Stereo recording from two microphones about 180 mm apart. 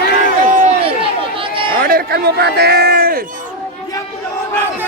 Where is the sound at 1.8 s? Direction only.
55° right (ahead or behind).